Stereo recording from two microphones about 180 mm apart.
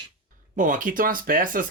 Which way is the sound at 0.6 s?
45° right (ahead or behind).